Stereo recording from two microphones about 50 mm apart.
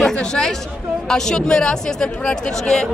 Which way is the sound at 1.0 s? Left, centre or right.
Centre.